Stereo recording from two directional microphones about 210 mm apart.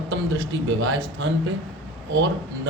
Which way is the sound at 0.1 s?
65° right (ahead or behind).